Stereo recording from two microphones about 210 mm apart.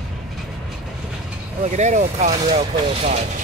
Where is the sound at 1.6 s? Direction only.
35° right (ahead or behind).